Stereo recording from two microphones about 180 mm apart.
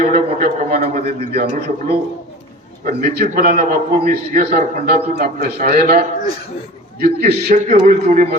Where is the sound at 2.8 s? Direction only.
60° right (ahead or behind).